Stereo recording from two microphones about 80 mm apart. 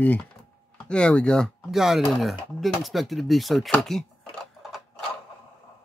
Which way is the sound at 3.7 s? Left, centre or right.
Centre.